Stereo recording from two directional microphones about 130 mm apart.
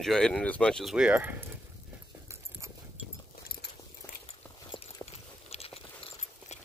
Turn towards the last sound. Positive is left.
turn(degrees=45)  # may be behind; listen again after turning